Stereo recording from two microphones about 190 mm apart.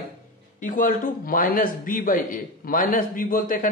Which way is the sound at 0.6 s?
45° left (ahead or behind).